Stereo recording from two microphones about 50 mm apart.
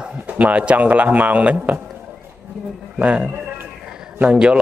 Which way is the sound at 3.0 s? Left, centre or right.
Right.